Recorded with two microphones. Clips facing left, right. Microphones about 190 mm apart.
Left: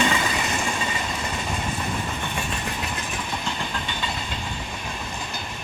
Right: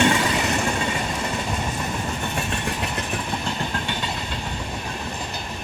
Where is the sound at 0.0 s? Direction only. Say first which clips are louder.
Right 4 dB; 65° right (ahead or behind).